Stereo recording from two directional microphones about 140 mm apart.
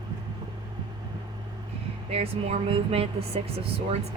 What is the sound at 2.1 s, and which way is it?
Speech, 45° right (ahead or behind).